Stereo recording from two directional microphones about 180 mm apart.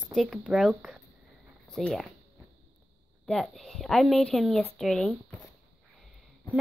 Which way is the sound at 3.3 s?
Centre (ahead or behind).